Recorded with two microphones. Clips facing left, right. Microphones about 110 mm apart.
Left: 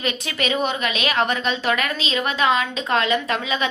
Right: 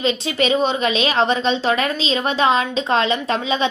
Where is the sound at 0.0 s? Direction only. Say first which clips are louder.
Right 6 dB; 25° right (ahead or behind).